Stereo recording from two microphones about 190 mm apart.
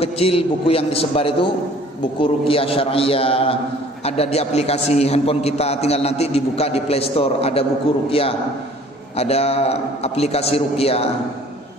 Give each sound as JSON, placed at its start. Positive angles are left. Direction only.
{"t": 0.0, "sound": "a man's voice", "side_deg": 30}